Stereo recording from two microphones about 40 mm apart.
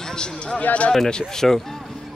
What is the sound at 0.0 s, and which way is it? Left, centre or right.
Speech, centre.